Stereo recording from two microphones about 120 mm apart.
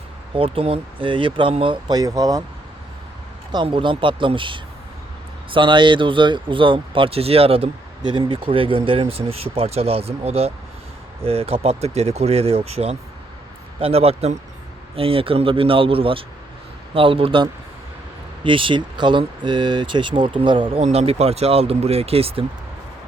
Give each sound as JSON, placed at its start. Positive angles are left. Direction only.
{"t": 0.3, "sound": "speech", "side_deg": -50}
{"t": 3.5, "sound": "speech", "side_deg": -45}
{"t": 20.8, "sound": "speech", "side_deg": -55}